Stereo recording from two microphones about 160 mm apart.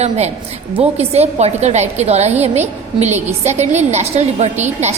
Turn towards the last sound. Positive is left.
turn(degrees=-45)  # may be behind; listen again after turning